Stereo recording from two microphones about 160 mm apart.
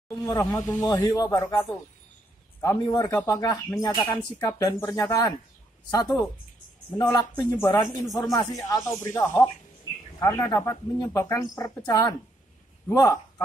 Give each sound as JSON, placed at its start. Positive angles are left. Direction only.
{"t": 0.1, "sound": "speech", "side_deg": 20}